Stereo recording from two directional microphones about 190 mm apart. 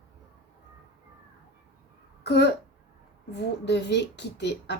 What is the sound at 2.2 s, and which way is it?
A child's voice, 65° left (ahead or behind).